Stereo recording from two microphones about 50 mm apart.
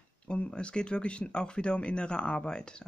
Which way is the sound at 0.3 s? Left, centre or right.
Left.